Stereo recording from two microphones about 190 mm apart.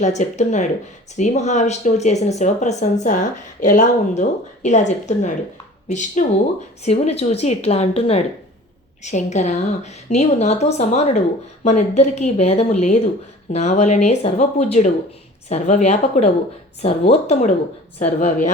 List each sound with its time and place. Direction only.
0.0 s speech: 40° left (ahead or behind)